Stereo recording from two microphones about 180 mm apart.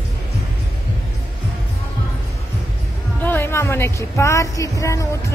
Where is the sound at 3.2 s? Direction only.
10° left (ahead or behind).